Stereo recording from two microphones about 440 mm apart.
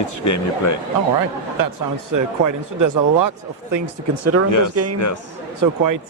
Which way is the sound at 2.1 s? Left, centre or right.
Right.